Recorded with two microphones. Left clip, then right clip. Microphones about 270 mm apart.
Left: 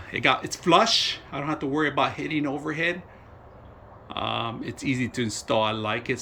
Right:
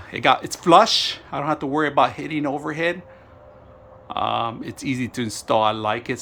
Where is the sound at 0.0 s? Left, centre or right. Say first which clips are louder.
Right 4 dB; centre.